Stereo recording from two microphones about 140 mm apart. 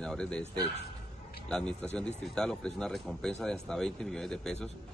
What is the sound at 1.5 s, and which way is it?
Speech, 5° left (ahead or behind).